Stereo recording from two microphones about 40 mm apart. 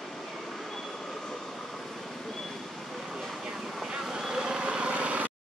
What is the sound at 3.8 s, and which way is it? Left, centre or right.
Vehicle, centre.